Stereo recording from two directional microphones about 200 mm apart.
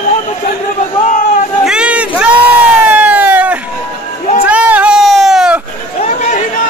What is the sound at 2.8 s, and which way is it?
Emergency vehicle, 5° right (ahead or behind).